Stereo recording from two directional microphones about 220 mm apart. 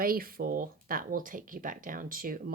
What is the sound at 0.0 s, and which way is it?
Speech, 40° right (ahead or behind).